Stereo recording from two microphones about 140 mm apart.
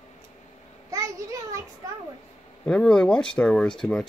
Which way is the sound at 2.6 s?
5° left (ahead or behind).